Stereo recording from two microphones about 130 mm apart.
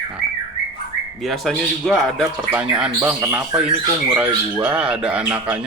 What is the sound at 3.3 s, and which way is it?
Speech, 5° right (ahead or behind).